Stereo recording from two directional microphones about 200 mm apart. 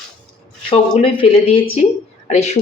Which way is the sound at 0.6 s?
25° left (ahead or behind).